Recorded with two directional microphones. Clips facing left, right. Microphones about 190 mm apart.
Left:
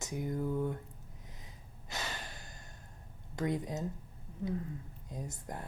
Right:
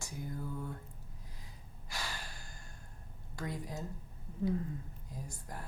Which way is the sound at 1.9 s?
20° left (ahead or behind).